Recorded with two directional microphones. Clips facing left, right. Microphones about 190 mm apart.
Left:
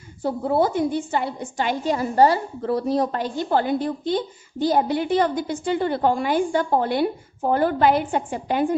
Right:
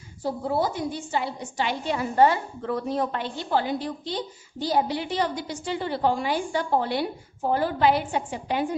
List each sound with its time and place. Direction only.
0.2 s a woman's voice: 55° left (ahead or behind)